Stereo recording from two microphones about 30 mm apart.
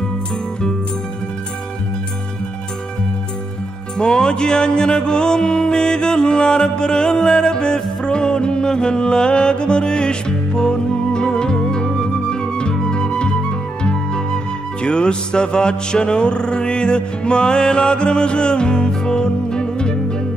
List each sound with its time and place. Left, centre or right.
4.0 s music: left
12.8 s flute: left